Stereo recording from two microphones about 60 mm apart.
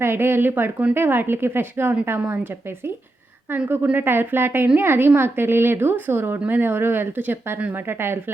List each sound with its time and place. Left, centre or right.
0.0 s a woman's voice: right